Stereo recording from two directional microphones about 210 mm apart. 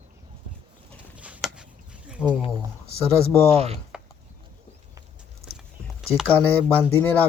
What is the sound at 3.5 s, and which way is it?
Speech, 30° right (ahead or behind).